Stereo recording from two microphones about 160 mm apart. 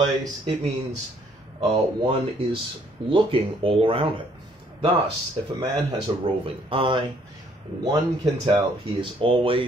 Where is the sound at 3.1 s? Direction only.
35° right (ahead or behind).